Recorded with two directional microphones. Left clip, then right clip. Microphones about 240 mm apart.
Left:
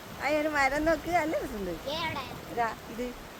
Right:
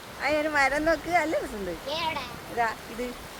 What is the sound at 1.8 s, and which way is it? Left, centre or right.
Speech, left.